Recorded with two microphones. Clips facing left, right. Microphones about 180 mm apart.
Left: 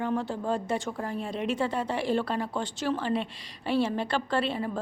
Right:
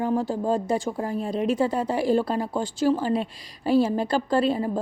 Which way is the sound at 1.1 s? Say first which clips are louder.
Right 6 dB; 40° right (ahead or behind).